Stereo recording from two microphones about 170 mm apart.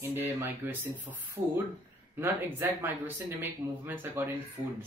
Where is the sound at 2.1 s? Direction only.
10° right (ahead or behind).